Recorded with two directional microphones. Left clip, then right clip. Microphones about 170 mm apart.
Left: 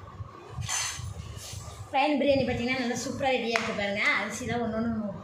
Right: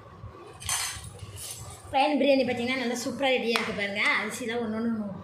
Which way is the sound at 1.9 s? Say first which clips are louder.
Right 2 dB; 40° right (ahead or behind).